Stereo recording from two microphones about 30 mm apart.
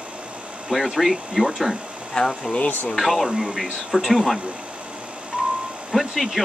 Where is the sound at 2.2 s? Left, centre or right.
Left.